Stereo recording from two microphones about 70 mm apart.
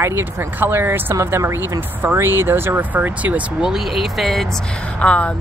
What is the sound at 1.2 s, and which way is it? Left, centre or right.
Speech, right.